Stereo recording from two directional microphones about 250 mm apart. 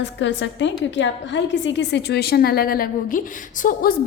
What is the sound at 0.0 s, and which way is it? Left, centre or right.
A woman's voice, left.